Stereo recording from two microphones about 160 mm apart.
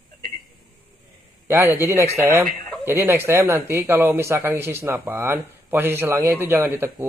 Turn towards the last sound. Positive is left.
turn(degrees=-15)  # may be behind; listen again after turning